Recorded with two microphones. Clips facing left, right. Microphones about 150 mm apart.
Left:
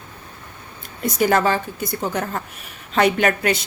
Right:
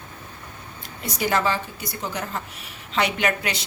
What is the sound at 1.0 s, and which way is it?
A woman's voice, 50° left (ahead or behind).